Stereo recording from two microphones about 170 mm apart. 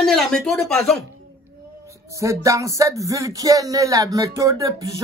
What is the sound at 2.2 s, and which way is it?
Speech, 20° right (ahead or behind).